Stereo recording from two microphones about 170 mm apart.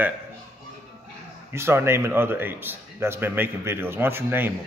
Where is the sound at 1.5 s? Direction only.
15° right (ahead or behind).